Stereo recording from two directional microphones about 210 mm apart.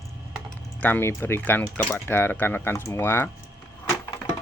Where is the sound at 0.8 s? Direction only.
10° left (ahead or behind).